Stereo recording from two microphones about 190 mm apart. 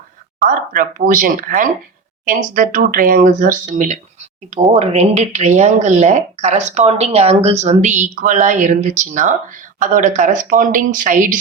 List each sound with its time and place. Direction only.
0.3 s speech: 45° right (ahead or behind)